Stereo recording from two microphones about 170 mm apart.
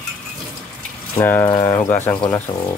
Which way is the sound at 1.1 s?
10° left (ahead or behind).